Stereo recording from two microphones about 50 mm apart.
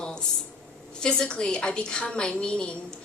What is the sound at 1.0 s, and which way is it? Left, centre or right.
Speech, centre.